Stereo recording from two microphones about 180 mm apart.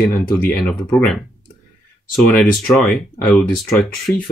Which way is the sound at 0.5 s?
5° left (ahead or behind).